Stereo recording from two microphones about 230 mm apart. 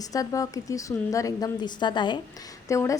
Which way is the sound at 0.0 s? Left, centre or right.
Centre.